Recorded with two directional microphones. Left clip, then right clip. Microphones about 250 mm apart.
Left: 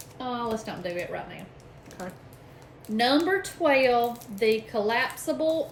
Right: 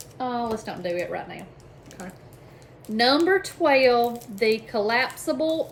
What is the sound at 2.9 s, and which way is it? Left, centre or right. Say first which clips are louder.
Speech: right 3 dB; centre.